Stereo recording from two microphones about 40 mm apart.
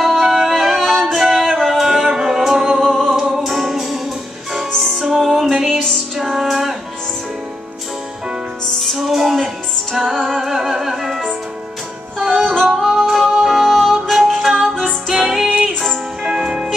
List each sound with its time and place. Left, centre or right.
0.0 s music: centre
2.8 s music: centre
5.7 s music: centre
6.1 s music: centre
8.9 s music: centre
15.4 s music: right
16.3 s music: centre